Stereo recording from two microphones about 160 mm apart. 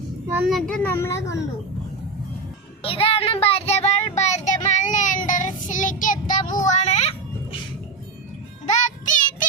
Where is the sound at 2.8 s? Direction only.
35° left (ahead or behind).